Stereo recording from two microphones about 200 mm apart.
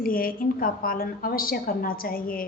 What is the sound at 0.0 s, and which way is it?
A woman's voice, 45° left (ahead or behind).